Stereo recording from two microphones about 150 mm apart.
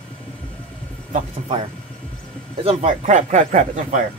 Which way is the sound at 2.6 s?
45° right (ahead or behind).